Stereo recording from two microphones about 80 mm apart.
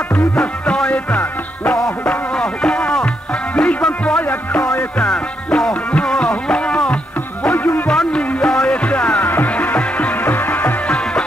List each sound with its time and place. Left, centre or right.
0.4 s music: centre
1.8 s music: centre
7.4 s music: left
7.9 s music: centre